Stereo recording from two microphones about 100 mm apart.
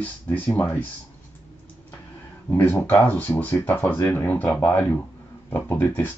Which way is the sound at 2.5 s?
20° left (ahead or behind).